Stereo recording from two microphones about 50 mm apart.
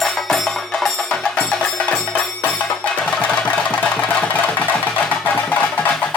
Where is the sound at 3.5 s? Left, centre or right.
Left.